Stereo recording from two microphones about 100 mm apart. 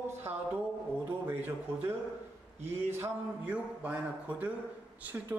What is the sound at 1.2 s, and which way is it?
A man's voice, 20° right (ahead or behind).